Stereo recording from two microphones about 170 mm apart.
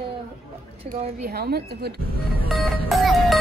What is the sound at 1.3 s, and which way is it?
Speech, 65° right (ahead or behind).